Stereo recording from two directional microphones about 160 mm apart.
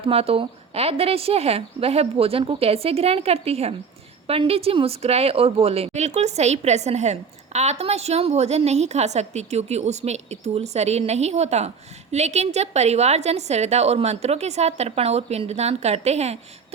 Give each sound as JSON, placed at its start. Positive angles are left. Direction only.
{"t": 0.0, "sound": "a woman's voice", "side_deg": -35}